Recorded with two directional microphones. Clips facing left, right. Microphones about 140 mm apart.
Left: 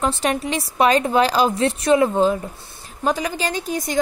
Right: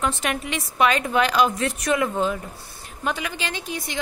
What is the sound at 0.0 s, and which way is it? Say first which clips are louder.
A woman's voice: left 4 dB; 35° left (ahead or behind).